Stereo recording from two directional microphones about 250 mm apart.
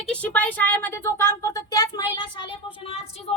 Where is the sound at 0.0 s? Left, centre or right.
Centre.